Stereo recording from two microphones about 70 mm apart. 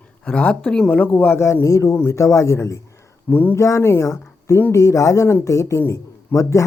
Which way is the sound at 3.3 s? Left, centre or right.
Left.